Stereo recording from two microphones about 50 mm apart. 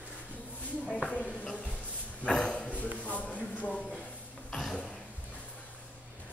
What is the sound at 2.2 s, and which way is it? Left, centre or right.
Dog, centre.